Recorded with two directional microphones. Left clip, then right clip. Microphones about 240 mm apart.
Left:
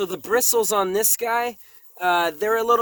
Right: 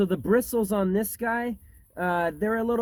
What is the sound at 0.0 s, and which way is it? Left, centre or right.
Speech, left.